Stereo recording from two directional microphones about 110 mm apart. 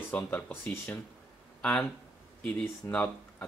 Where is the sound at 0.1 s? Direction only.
15° left (ahead or behind).